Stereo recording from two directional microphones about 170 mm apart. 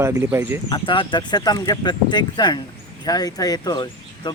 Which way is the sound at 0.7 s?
30° left (ahead or behind).